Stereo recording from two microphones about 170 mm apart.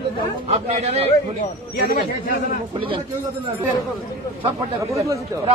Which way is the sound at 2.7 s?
30° right (ahead or behind).